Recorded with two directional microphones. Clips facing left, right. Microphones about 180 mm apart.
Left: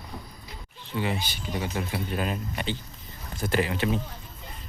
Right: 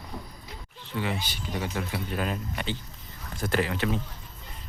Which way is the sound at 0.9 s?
15° left (ahead or behind).